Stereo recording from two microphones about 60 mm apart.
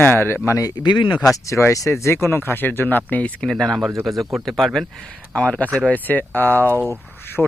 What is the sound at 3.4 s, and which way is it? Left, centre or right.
Speech, centre.